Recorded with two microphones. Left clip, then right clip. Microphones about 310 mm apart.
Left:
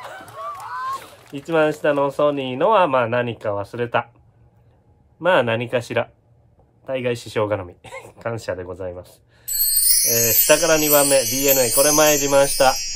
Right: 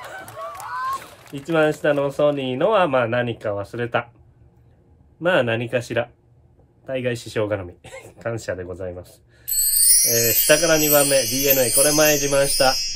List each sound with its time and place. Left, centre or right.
0.3 s a sound: centre
1.3 s speech: centre
5.2 s speech: centre